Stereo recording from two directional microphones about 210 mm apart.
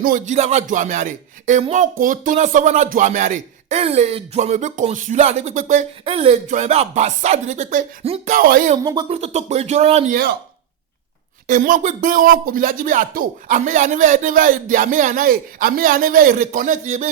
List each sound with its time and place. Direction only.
0.0 s speech: 35° right (ahead or behind)
8.8 s speech: 15° right (ahead or behind)
9.0 s speech: 30° right (ahead or behind)
11.4 s speech: 40° right (ahead or behind)